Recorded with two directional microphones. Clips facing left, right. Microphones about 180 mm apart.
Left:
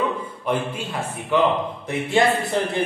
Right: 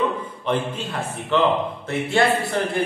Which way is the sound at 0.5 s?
10° left (ahead or behind).